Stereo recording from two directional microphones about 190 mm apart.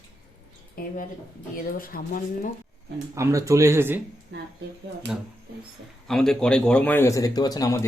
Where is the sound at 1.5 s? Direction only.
50° left (ahead or behind).